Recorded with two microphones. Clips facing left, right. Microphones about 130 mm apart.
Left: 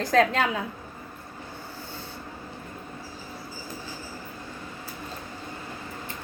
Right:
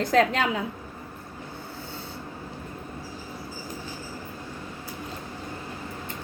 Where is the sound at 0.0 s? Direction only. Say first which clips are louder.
Even; 25° right (ahead or behind).